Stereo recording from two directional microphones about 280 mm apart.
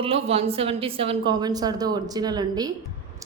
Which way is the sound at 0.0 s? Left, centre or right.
Right.